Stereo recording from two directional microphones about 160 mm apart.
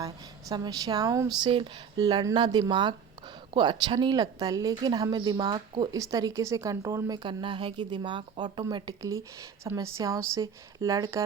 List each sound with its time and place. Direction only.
0.0 s speech: 25° right (ahead or behind)